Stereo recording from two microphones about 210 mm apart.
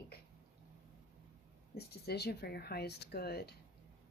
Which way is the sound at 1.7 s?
50° left (ahead or behind).